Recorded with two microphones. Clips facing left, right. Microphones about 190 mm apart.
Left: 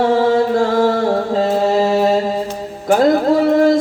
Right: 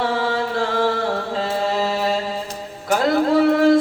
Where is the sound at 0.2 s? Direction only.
45° left (ahead or behind).